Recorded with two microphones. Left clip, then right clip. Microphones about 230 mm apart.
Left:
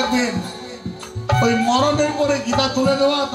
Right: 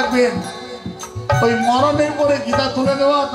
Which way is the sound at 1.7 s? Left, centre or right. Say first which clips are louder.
Right 2 dB; left.